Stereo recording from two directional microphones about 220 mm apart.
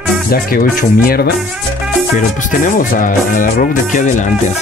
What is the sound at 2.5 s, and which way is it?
Speech, 35° left (ahead or behind).